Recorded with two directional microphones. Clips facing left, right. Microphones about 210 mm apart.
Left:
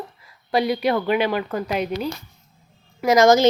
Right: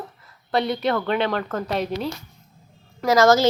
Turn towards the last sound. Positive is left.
turn(degrees=15)  # may be behind; listen again after turning